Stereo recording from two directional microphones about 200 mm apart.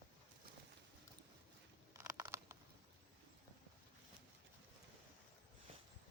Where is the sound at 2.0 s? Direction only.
15° right (ahead or behind).